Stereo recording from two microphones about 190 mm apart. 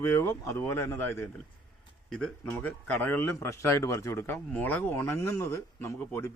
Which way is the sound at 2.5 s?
10° left (ahead or behind).